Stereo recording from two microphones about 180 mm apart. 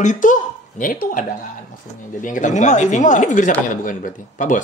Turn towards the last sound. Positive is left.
turn(degrees=45)  # may be behind; listen again after turning